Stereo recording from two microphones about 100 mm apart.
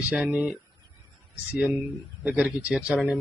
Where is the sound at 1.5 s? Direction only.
15° right (ahead or behind).